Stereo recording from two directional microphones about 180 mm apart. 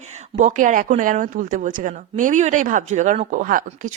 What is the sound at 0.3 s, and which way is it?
Speech, 45° right (ahead or behind).